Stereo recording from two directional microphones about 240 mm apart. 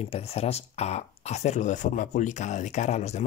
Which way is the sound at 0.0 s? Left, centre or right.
Left.